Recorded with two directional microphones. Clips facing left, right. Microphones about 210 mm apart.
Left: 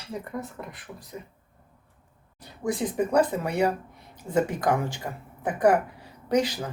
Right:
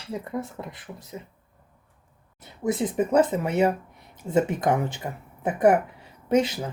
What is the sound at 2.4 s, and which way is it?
Speech, 20° right (ahead or behind).